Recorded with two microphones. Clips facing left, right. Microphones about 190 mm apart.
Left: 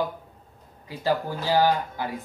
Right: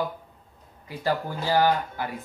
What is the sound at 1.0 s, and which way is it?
Speech, 15° left (ahead or behind).